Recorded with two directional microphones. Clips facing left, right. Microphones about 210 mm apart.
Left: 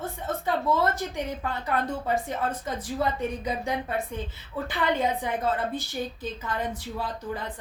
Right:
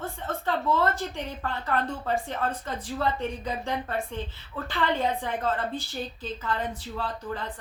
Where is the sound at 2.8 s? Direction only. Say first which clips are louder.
Even; 10° left (ahead or behind).